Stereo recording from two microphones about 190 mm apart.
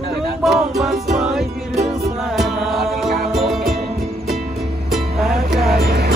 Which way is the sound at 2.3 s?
Centre (ahead or behind).